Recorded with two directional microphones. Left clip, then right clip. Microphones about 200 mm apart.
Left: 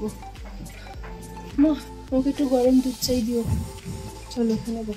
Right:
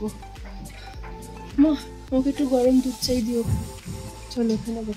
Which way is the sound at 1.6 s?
5° right (ahead or behind).